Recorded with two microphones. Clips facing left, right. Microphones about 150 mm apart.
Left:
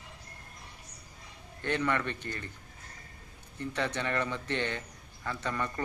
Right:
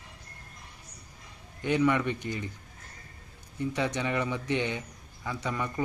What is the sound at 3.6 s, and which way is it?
A man's voice, 10° right (ahead or behind).